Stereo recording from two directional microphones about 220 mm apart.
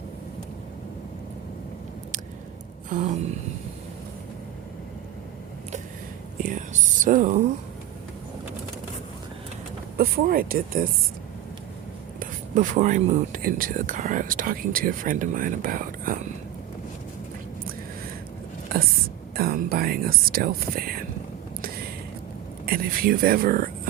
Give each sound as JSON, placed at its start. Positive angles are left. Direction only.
{"t": 6.4, "sound": "whispering", "side_deg": -35}
{"t": 10.0, "sound": "speech", "side_deg": -40}
{"t": 12.2, "sound": "speech", "side_deg": -35}
{"t": 19.4, "sound": "speech", "side_deg": -45}
{"t": 22.6, "sound": "speech", "side_deg": -40}